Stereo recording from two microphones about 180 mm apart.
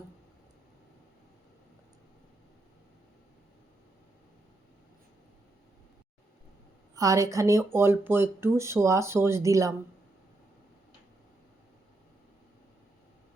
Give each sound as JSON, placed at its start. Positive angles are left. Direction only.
{"t": 6.9, "sound": "speech", "side_deg": -20}